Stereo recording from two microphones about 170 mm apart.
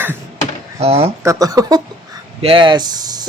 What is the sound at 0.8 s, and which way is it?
Speech, 35° right (ahead or behind).